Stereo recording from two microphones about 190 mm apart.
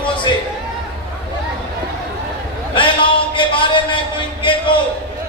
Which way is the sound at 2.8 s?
25° left (ahead or behind).